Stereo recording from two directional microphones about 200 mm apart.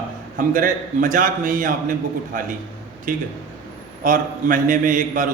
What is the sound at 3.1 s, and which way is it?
A man's voice, 40° right (ahead or behind).